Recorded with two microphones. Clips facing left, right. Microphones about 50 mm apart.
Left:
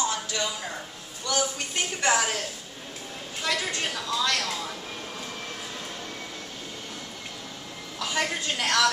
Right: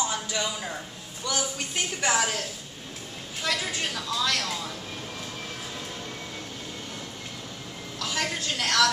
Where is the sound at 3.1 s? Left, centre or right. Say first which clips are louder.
Left 1 dB; centre.